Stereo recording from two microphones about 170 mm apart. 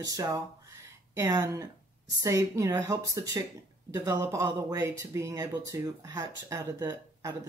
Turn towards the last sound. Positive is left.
turn(degrees=-20)  # may be behind; listen again after turning